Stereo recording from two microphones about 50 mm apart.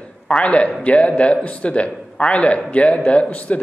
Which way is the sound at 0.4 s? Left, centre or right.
Left.